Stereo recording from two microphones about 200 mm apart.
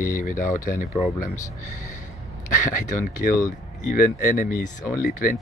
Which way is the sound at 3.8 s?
45° left (ahead or behind).